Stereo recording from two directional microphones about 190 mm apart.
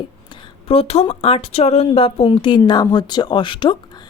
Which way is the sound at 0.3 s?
30° left (ahead or behind).